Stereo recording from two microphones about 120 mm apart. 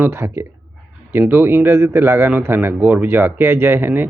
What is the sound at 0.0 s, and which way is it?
Speech, 20° right (ahead or behind).